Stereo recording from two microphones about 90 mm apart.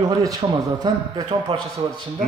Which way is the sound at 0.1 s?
40° right (ahead or behind).